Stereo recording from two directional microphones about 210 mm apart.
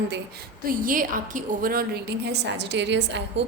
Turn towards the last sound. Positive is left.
turn(degrees=-55)  # may be behind; listen again after turning